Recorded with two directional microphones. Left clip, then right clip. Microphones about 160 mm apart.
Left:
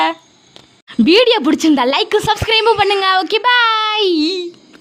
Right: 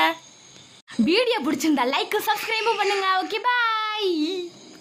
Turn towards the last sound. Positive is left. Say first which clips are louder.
# left 10 dB
turn(degrees=55)  # may be behind; listen again after turning